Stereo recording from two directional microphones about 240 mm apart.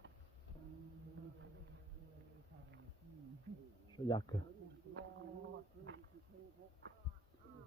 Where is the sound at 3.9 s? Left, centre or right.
Centre.